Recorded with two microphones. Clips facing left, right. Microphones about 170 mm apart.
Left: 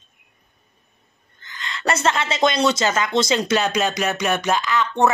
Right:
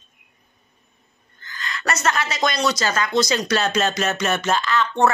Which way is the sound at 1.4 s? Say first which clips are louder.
Left 2 dB; 20° left (ahead or behind).